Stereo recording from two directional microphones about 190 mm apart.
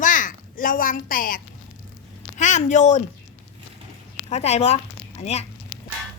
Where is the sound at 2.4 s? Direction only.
40° left (ahead or behind).